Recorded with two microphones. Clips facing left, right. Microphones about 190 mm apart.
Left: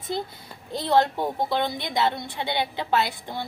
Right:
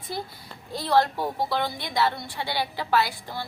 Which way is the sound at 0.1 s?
20° left (ahead or behind).